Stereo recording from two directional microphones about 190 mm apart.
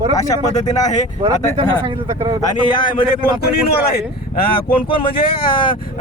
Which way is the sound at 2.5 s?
25° left (ahead or behind).